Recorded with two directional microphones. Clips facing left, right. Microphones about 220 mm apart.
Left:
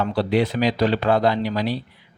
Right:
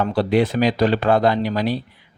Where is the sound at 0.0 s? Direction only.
45° right (ahead or behind).